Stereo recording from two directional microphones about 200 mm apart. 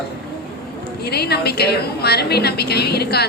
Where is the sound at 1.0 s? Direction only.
55° left (ahead or behind).